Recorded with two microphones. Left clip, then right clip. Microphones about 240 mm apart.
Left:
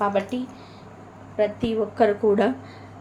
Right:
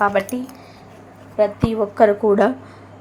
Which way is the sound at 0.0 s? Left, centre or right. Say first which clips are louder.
Right 5 dB; right.